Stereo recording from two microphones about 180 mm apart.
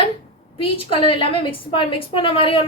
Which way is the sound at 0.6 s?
30° left (ahead or behind).